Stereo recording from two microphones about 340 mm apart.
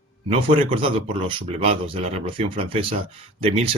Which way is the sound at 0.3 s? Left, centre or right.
Centre.